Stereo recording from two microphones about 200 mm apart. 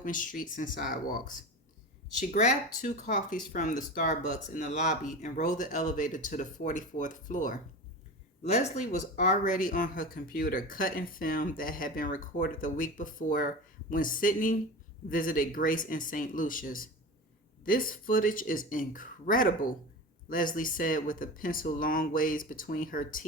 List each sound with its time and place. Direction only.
0.0 s speech: 40° left (ahead or behind)